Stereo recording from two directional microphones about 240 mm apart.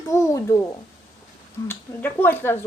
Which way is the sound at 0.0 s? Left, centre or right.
Centre.